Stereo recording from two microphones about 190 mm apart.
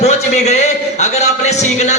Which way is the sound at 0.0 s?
35° left (ahead or behind).